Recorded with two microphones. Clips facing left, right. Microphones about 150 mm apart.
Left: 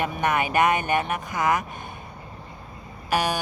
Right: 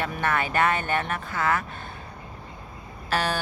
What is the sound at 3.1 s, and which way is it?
Speech, 15° left (ahead or behind).